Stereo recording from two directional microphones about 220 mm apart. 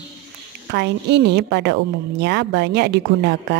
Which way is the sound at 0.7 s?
50° right (ahead or behind).